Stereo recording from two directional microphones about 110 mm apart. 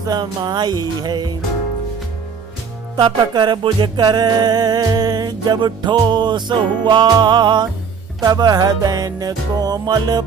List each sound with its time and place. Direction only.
0.0 s music: 40° right (ahead or behind)
3.0 s music: 45° right (ahead or behind)